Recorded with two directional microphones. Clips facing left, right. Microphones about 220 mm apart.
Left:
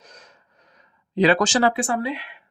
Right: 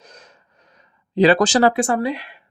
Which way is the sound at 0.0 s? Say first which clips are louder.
Right 3 dB; 30° right (ahead or behind).